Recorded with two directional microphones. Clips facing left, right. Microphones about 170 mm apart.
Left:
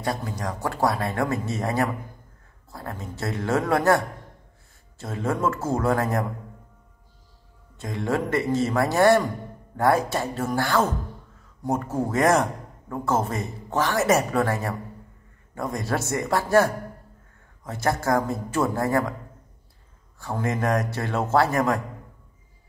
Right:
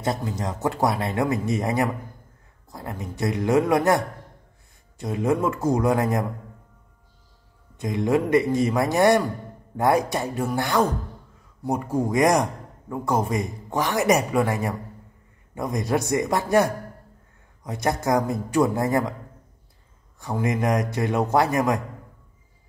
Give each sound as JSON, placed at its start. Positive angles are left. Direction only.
{"t": 0.0, "sound": "a man's voice", "side_deg": -20}
{"t": 7.7, "sound": "a man's voice", "side_deg": -20}
{"t": 20.2, "sound": "a man's voice", "side_deg": -15}